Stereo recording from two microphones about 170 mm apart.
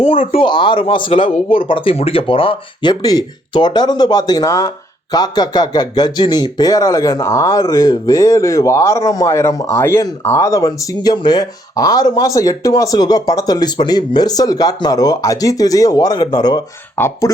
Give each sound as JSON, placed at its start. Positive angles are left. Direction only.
{"t": 0.0, "sound": "speech", "side_deg": 50}
{"t": 0.3, "sound": "speech", "side_deg": 30}